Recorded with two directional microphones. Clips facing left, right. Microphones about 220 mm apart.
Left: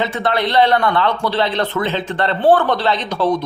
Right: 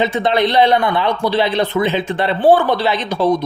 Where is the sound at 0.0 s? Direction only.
20° right (ahead or behind).